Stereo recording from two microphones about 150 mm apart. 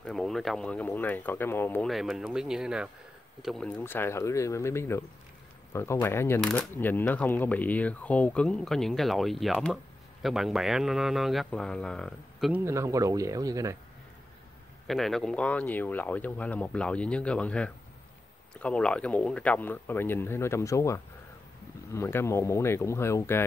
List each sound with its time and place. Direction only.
0.0 s speech: centre (ahead or behind)
1.9 s speech: centre (ahead or behind)
3.4 s speech: 5° left (ahead or behind)
6.4 s speech: centre (ahead or behind)
6.7 s speech: 15° left (ahead or behind); by 12.6 s centre (ahead or behind)
12.6 s speech: 20° right (ahead or behind)
14.9 s speech: centre (ahead or behind)